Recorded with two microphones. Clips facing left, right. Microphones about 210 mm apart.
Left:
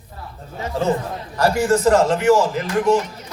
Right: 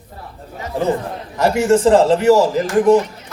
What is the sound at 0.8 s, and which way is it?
Speech, 15° right (ahead or behind).